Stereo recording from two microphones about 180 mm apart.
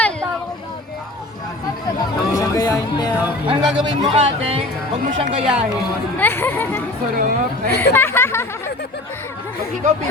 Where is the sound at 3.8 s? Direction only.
25° right (ahead or behind).